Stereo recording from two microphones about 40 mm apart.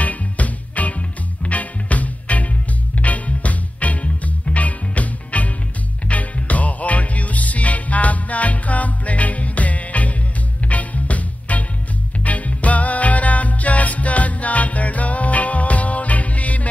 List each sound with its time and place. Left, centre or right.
0.0 s music: left